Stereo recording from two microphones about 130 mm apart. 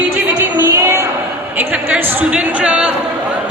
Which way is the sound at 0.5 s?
20° right (ahead or behind).